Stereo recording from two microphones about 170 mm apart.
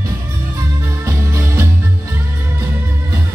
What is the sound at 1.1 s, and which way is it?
Music, 20° right (ahead or behind).